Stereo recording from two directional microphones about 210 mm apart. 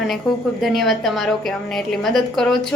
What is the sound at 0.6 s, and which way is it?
A woman's voice, centre (ahead or behind).